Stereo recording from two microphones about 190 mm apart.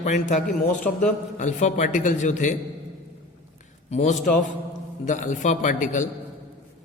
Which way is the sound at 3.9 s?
40° left (ahead or behind).